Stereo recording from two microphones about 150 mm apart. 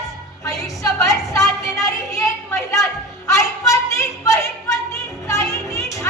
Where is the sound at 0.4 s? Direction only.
20° left (ahead or behind).